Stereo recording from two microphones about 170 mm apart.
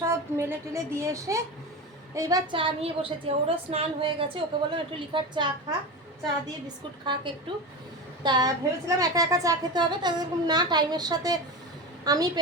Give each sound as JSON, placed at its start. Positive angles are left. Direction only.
{"t": 0.0, "sound": "a woman's voice", "side_deg": -15}
{"t": 7.0, "sound": "a woman's voice", "side_deg": -30}